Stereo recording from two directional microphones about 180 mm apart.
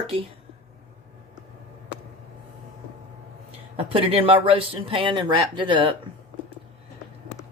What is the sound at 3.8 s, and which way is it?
Speech, 30° right (ahead or behind).